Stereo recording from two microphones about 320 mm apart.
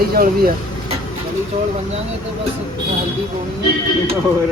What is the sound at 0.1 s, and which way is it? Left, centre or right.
Speech, right.